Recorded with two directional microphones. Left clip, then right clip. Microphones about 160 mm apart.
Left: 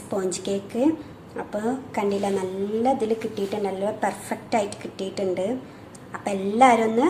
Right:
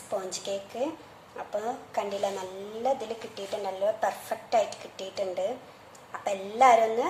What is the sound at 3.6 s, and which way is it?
A woman's voice, 10° left (ahead or behind).